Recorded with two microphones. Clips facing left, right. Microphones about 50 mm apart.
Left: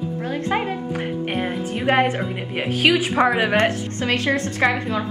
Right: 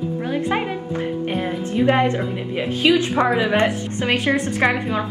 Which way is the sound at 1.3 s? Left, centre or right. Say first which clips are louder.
Right 1 dB; left.